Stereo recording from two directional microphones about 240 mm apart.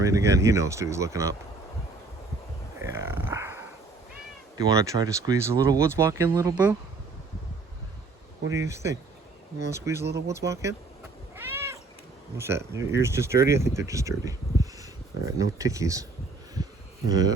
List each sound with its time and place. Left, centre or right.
0.0 s speech: centre
2.8 s speech: centre
8.4 s speech: centre
11.3 s cat: centre
12.4 s speech: centre
17.1 s speech: centre